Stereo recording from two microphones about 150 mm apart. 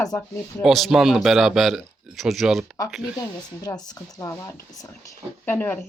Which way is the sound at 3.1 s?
25° left (ahead or behind).